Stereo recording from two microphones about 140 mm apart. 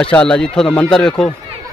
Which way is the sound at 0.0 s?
5° left (ahead or behind).